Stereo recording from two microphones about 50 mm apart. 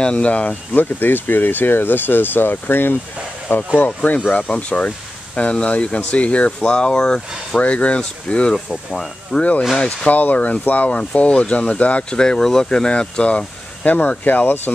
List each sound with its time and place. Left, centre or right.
0.0 s speech: left
0.7 s speech: left
3.4 s speech: left; by 7.6 s centre
7.6 s speech: left
8.5 s speech: centre
9.8 s speech: left
12.2 s speech: centre
13.8 s speech: left